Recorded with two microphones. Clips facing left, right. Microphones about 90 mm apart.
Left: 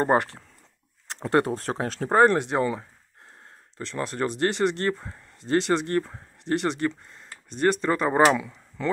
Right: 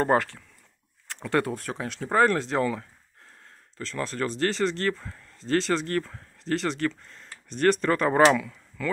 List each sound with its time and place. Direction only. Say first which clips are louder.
0.0 s speech: left 1 dB; 25° left (ahead or behind)
2.2 s speech: left 3 dB; 20° left (ahead or behind)
8.3 s speech: even; 20° left (ahead or behind)